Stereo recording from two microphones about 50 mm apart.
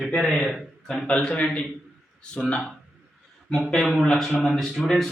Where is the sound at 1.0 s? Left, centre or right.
Left.